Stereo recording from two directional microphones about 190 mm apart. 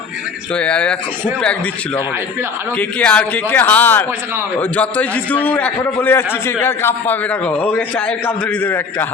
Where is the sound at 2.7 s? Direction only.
5° left (ahead or behind).